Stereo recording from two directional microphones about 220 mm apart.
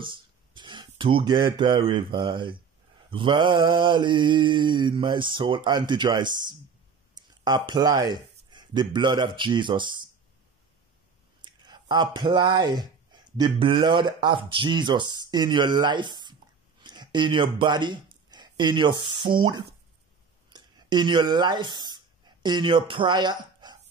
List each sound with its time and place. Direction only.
0.0 s speech: 20° right (ahead or behind)
3.1 s mantra: 20° right (ahead or behind)
7.2 s speech: 20° right (ahead or behind)
11.4 s speech: 20° right (ahead or behind)
20.5 s a sound: 20° right (ahead or behind)